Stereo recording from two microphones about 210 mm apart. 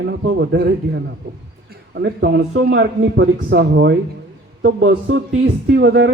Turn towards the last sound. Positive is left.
turn(degrees=-55)  # may be behind; listen again after turning